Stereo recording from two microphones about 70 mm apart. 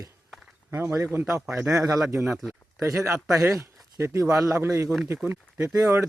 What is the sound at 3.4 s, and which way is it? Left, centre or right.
Speech, right.